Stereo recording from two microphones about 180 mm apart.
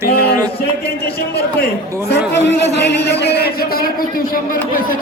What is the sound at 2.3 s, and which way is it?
A man's voice, 75° left (ahead or behind).